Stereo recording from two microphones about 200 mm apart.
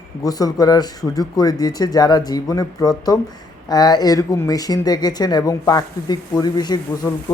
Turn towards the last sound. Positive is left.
turn(degrees=20)  # may be behind; listen again after turning